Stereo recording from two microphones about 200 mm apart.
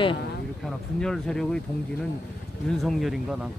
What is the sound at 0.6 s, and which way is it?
Speech, 5° left (ahead or behind).